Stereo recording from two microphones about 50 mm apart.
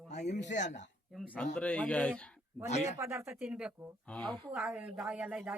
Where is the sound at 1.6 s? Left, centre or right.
Left.